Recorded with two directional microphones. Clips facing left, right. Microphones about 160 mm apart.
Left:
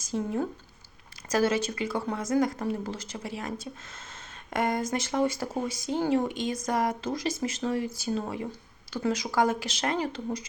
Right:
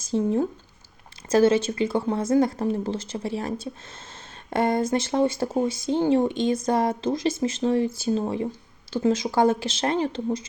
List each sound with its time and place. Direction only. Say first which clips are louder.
0.0 s speech: right 6 dB; 25° right (ahead or behind)